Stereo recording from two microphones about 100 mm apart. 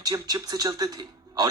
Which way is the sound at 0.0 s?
40° right (ahead or behind).